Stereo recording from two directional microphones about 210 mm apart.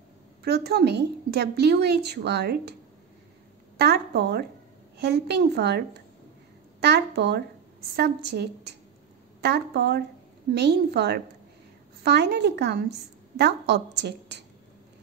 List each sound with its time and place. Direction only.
0.4 s a woman's voice: 50° right (ahead or behind)
3.7 s a woman's voice: 50° right (ahead or behind)